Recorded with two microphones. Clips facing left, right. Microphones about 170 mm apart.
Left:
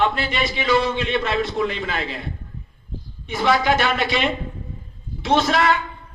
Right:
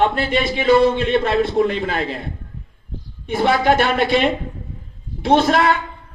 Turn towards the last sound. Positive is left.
turn(degrees=-50)  # may be behind; listen again after turning